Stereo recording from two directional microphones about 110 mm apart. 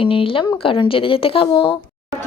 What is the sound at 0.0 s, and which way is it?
Speech, 55° left (ahead or behind).